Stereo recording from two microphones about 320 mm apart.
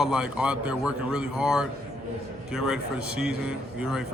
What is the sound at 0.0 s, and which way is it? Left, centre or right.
Speech, centre.